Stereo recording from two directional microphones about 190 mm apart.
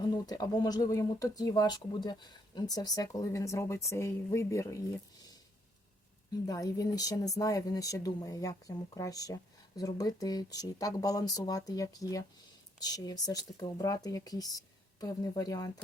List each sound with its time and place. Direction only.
0.1 s speech: 20° left (ahead or behind)
6.4 s speech: 20° left (ahead or behind)